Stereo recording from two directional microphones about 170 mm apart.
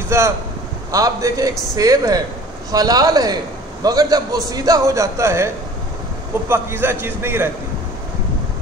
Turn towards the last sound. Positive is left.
turn(degrees=-15)  # may be behind; listen again after turning